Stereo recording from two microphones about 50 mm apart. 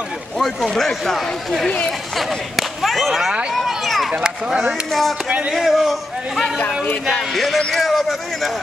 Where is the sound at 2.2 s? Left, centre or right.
Centre.